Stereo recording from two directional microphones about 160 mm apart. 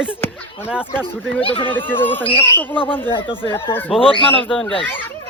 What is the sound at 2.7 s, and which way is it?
Speech, 35° left (ahead or behind).